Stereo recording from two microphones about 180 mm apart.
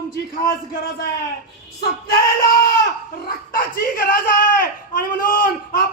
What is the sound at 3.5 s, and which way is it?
A man's voice, 50° left (ahead or behind).